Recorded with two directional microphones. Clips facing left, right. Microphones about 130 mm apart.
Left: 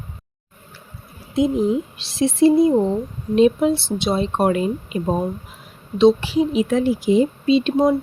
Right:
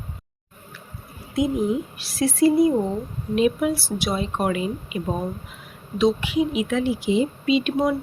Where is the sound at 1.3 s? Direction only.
25° left (ahead or behind).